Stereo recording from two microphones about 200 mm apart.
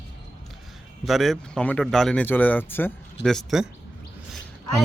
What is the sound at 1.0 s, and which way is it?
Speech, centre (ahead or behind).